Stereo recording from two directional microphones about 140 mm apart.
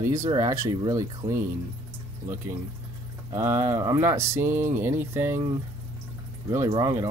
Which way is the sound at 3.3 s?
20° right (ahead or behind).